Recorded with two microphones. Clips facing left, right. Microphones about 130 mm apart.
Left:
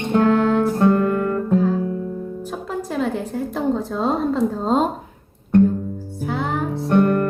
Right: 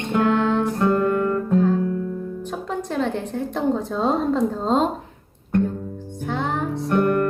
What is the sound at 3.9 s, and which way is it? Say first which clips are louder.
Speech: even; centre (ahead or behind).